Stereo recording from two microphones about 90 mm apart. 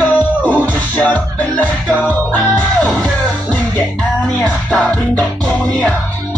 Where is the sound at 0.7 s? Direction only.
15° left (ahead or behind).